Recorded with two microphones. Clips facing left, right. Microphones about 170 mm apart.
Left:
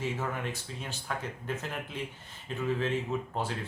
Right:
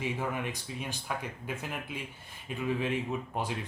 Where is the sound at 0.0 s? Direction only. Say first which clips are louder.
Even; 15° right (ahead or behind).